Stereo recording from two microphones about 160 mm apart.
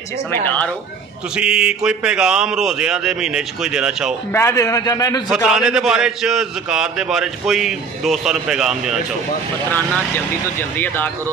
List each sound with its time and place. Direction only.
0.3 s speech: 10° left (ahead or behind)
1.3 s a man's voice: 5° right (ahead or behind)
4.3 s a man's voice: 15° left (ahead or behind)
5.3 s a man's voice: 5° right (ahead or behind)
9.7 s speech: 10° left (ahead or behind)